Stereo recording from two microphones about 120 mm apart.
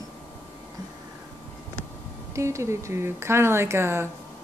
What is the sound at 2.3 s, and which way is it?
Speech, 25° right (ahead or behind).